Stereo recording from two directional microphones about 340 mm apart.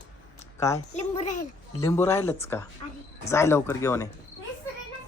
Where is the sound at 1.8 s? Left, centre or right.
Centre.